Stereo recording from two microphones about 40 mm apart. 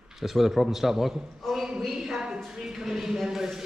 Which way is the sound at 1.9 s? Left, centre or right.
Centre.